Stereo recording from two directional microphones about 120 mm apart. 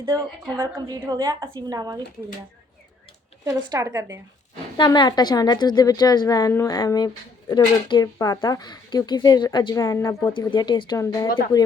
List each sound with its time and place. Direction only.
0.6 s a woman's voice: 35° right (ahead or behind)
3.6 s speech: 30° right (ahead or behind)
4.9 s a woman's voice: 35° left (ahead or behind)
10.9 s speech: 30° left (ahead or behind)